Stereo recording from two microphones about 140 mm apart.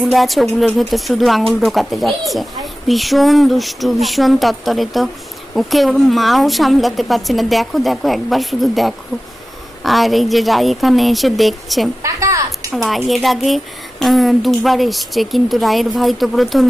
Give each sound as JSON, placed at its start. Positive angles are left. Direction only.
{"t": 0.0, "sound": "speech", "side_deg": 0}
{"t": 12.0, "sound": "a sound", "side_deg": -20}
{"t": 12.7, "sound": "speech", "side_deg": 0}